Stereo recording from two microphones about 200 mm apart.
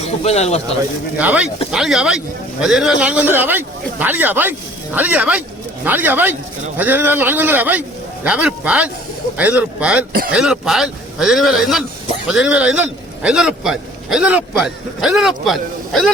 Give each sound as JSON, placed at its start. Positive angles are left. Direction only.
{"t": 0.0, "sound": "speech", "side_deg": 35}
{"t": 1.2, "sound": "a man's voice", "side_deg": -5}